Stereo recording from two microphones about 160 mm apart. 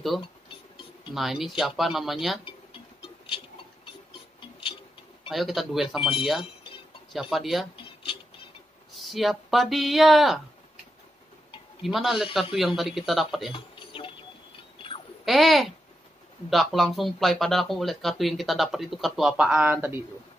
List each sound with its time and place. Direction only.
0.5 s music: 30° left (ahead or behind)
1.1 s speech: centre (ahead or behind)
2.4 s a sound: 30° left (ahead or behind)
4.4 s music: 30° left (ahead or behind)
5.3 s speech: centre (ahead or behind)
7.7 s music: 30° left (ahead or behind)
8.9 s speech: centre (ahead or behind)
11.8 s speech: centre (ahead or behind)
13.5 s a sound: 30° left (ahead or behind)
15.2 s speech: centre (ahead or behind)